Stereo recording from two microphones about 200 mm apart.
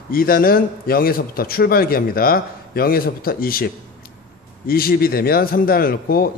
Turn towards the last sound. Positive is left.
turn(degrees=50)  # may be behind; listen again after turning